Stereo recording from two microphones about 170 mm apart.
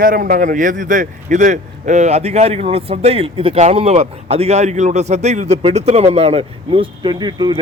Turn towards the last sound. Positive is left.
turn(degrees=-25)  # may be behind; listen again after turning